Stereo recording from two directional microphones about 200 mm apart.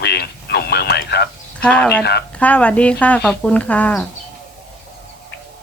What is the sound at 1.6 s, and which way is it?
Speech, 5° left (ahead or behind).